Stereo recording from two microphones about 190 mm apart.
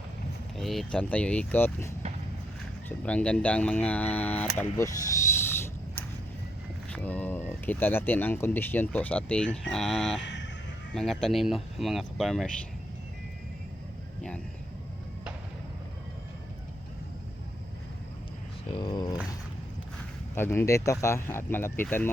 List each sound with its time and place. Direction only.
0.5 s speech: centre (ahead or behind)
3.0 s speech: 5° left (ahead or behind)
6.9 s speech: 5° left (ahead or behind)
10.2 s vehicle: 70° left (ahead or behind)
10.9 s speech: 5° left (ahead or behind)
18.7 s speech: 25° left (ahead or behind)
20.3 s speech: 10° left (ahead or behind)